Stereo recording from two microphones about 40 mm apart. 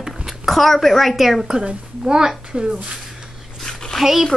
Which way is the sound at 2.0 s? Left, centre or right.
Centre.